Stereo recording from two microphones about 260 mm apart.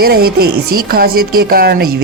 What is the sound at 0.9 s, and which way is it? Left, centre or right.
Speech, right.